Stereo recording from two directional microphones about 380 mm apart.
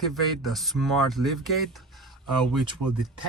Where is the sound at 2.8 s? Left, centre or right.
Right.